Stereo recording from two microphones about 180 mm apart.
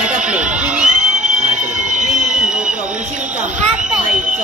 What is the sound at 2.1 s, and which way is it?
Run, 5° right (ahead or behind).